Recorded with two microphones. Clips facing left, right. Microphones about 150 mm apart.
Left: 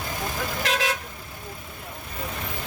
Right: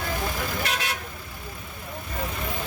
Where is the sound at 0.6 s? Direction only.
90° left.